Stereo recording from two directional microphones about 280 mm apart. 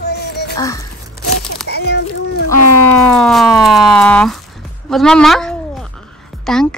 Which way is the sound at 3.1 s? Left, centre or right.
Centre.